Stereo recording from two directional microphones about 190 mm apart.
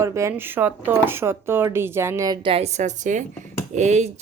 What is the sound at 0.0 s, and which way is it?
Speech, 15° right (ahead or behind).